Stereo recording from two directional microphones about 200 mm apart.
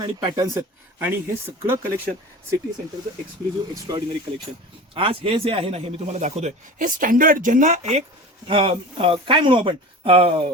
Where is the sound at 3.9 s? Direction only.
20° right (ahead or behind).